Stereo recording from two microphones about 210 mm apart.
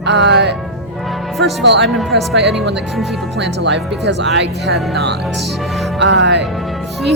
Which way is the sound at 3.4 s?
55° right (ahead or behind).